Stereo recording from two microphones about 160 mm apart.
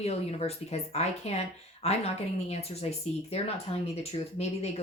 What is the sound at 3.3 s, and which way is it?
Speech, 40° left (ahead or behind).